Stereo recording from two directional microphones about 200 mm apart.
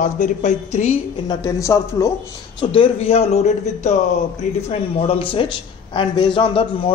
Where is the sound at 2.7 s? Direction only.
30° left (ahead or behind).